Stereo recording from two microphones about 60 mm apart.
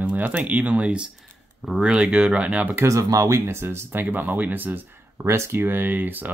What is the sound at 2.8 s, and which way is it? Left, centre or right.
Speech, right.